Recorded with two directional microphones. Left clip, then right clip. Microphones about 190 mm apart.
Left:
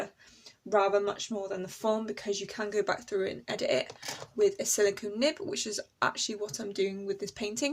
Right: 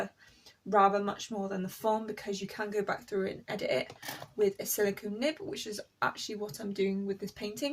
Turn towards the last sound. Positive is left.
turn(degrees=50)  # may be behind; listen again after turning